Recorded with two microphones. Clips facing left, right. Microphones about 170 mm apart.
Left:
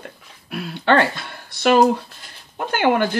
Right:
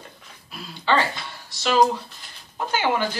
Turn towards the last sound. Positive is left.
turn(degrees=55)  # may be behind; listen again after turning